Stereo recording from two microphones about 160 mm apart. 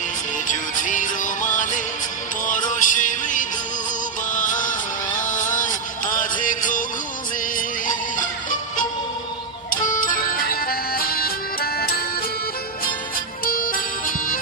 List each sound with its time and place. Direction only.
0.5 s music: 55° left (ahead or behind)
9.8 s music: 55° left (ahead or behind); by 12.3 s 75° left (ahead or behind)
13.4 s music: 65° left (ahead or behind)